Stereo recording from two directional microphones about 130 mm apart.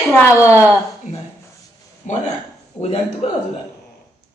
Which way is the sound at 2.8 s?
55° left (ahead or behind).